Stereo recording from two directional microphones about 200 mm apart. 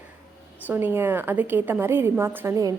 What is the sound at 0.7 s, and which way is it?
A woman's voice, 10° right (ahead or behind).